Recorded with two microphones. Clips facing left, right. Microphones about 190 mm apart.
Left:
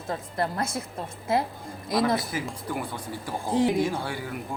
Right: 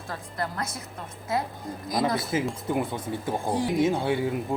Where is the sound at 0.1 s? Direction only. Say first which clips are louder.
Left 4 dB; 25° left (ahead or behind).